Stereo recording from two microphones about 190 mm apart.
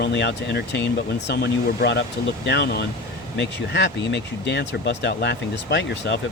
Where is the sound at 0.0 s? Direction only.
65° left (ahead or behind).